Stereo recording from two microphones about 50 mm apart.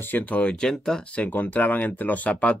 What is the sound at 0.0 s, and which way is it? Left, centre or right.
Speech, left.